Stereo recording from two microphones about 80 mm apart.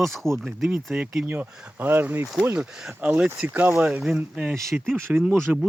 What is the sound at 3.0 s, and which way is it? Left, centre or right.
Speech, centre.